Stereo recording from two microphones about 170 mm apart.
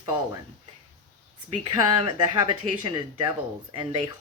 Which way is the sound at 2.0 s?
30° right (ahead or behind).